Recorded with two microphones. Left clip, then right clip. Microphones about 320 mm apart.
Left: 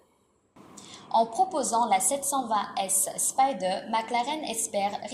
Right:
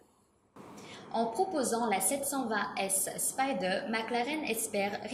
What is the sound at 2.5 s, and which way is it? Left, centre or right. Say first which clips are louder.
A woman's voice: left 5 dB; centre.